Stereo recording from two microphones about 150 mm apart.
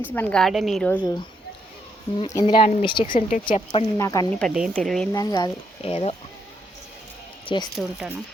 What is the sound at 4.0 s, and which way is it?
Speech, 25° left (ahead or behind).